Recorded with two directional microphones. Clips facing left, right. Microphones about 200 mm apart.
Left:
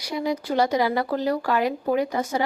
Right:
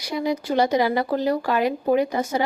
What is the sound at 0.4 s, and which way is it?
A woman's voice, 20° right (ahead or behind).